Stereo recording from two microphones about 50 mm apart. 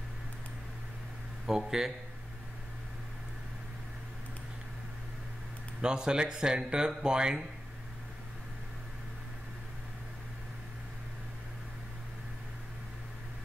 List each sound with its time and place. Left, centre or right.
1.6 s speech: centre
5.8 s speech: centre